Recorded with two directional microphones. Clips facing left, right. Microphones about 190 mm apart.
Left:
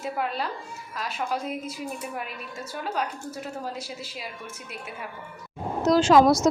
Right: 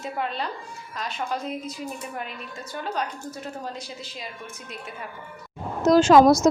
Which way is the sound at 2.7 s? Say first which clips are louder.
Even; 5° left (ahead or behind).